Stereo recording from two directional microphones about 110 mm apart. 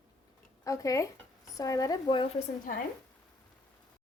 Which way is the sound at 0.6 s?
30° left (ahead or behind).